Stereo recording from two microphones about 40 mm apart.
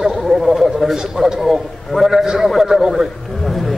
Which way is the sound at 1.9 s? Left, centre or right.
Centre.